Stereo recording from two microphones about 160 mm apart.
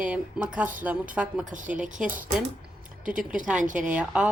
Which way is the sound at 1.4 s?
55° right (ahead or behind).